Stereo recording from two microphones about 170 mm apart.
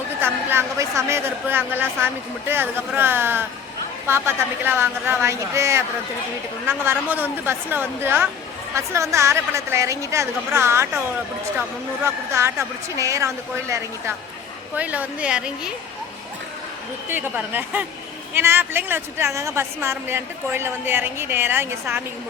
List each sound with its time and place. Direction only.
0.2 s a woman's voice: 15° right (ahead or behind)
12.0 s a woman's voice: 15° right (ahead or behind)
17.1 s a woman's voice: 10° right (ahead or behind)